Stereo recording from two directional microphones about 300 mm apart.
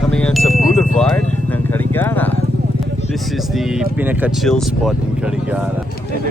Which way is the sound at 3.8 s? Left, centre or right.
Centre.